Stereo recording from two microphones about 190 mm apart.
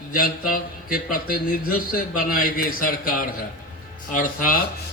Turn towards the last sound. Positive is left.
turn(degrees=45)  # may be behind; listen again after turning